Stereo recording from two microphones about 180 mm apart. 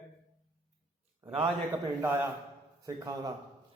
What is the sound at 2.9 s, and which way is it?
Speech, 20° right (ahead or behind).